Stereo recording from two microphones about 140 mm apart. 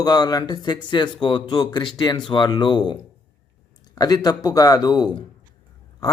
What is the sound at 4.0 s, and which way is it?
A man's voice, 30° left (ahead or behind).